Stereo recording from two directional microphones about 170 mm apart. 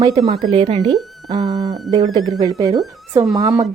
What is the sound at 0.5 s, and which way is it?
Speech, 35° right (ahead or behind).